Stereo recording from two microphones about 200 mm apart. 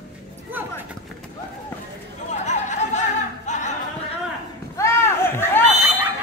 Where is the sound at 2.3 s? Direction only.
35° left (ahead or behind).